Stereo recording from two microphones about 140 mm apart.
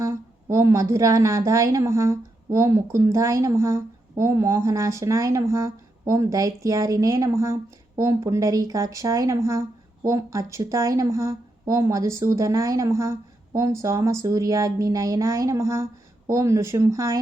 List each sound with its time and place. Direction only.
0.0 s a woman's voice: 20° right (ahead or behind)